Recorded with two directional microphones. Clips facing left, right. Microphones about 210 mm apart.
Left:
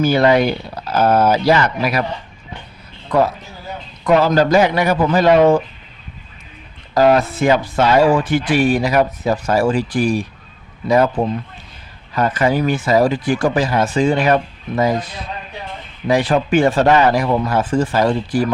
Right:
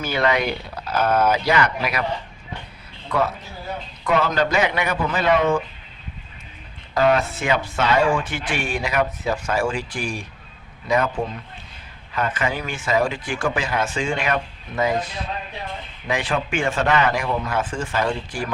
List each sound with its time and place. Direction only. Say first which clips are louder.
0.0 s speech: left 8 dB; 35° left (ahead or behind)
4.0 s speech: left 7 dB; 35° left (ahead or behind)
6.9 s speech: left 5 dB; 40° left (ahead or behind)
12.1 s speech: left 8 dB; 40° left (ahead or behind)